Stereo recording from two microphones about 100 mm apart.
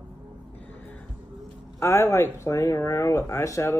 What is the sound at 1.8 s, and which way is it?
Speech, 30° left (ahead or behind).